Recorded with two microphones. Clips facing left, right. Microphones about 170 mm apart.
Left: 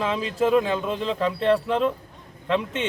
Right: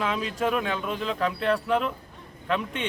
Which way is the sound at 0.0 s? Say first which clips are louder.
Left 4 dB; 30° left (ahead or behind).